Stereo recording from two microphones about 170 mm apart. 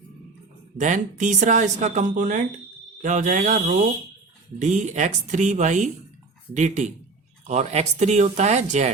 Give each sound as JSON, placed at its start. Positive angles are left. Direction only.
{"t": 0.8, "sound": "speech", "side_deg": -45}